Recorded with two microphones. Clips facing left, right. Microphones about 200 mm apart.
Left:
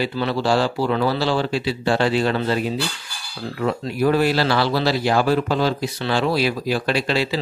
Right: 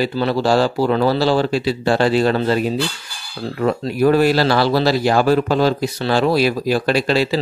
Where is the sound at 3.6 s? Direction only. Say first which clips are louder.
Right 4 dB; 50° right (ahead or behind).